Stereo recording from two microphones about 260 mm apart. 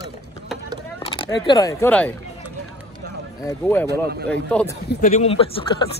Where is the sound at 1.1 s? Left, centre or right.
Centre.